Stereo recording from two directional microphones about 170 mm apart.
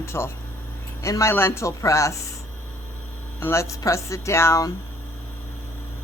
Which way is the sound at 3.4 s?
15° left (ahead or behind).